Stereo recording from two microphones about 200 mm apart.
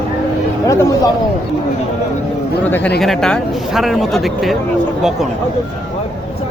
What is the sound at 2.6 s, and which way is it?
Speech, 10° left (ahead or behind).